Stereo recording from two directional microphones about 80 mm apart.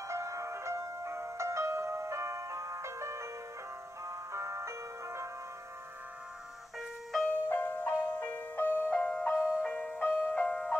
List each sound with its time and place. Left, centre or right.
0.1 s music: right
7.4 s music: left